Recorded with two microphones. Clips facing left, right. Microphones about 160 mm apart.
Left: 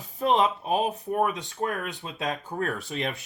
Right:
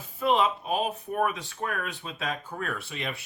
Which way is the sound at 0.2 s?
40° left (ahead or behind).